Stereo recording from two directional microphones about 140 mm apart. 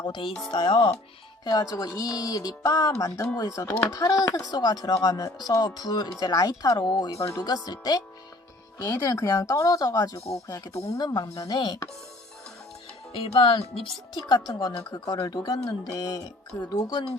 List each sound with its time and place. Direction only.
0.0 s speech: 35° left (ahead or behind)
1.5 s speech: 25° left (ahead or behind)
10.2 s speech: 45° left (ahead or behind)
10.4 s speech: 25° left (ahead or behind)
13.1 s speech: 40° left (ahead or behind)
14.3 s speech: 30° left (ahead or behind)